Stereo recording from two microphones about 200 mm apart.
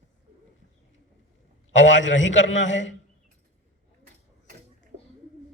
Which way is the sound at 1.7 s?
65° left (ahead or behind).